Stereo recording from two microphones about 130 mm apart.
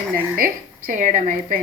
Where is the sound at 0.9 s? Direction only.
75° right (ahead or behind).